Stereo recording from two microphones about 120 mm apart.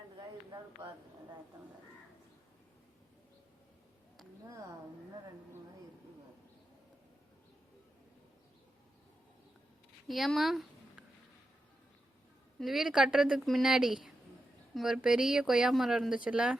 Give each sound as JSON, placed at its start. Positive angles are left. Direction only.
{"t": 0.2, "sound": "a sound", "side_deg": -40}
{"t": 4.4, "sound": "a woman's voice", "side_deg": -25}
{"t": 10.1, "sound": "speech", "side_deg": 0}
{"t": 12.5, "sound": "speech", "side_deg": 0}